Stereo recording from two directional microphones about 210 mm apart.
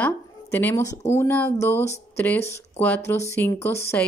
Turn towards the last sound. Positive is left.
turn(degrees=10)  # may be behind; listen again after turning